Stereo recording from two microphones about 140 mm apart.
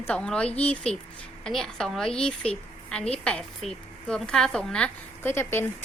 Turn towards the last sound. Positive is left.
turn(degrees=15)  # may be behind; listen again after turning